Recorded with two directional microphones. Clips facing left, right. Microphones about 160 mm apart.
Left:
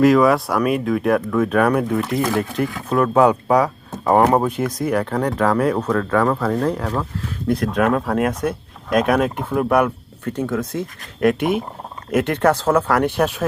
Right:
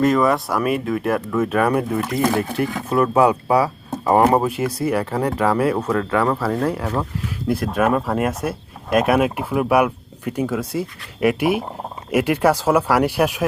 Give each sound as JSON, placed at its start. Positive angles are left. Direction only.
{"t": 0.0, "sound": "speech", "side_deg": 0}